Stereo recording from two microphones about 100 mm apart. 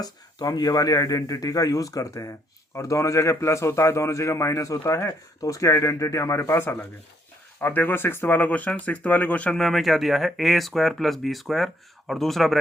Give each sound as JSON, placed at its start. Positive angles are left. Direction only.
{"t": 0.0, "sound": "a man's voice", "side_deg": 40}